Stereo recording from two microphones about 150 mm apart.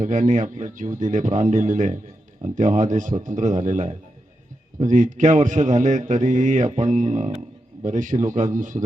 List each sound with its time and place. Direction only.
0.0 s speech: 60° right (ahead or behind)